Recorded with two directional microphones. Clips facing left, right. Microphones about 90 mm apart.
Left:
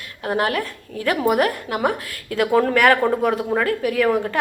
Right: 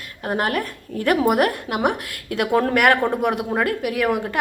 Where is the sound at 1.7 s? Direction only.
20° right (ahead or behind).